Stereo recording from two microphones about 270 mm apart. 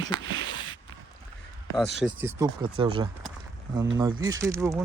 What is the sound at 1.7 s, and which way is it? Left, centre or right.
Speech, centre.